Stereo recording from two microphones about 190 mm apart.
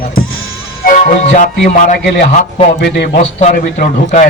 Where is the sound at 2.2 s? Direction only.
35° left (ahead or behind).